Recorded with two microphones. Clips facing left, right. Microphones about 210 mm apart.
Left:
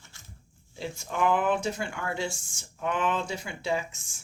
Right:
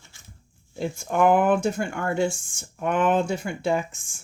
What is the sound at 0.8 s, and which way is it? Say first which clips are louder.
Speech: right 7 dB; 50° right (ahead or behind).